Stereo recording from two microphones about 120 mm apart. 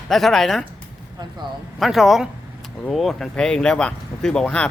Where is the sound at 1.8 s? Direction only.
Centre (ahead or behind).